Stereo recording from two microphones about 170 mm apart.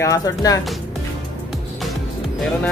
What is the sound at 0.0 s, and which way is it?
Speech, 20° left (ahead or behind).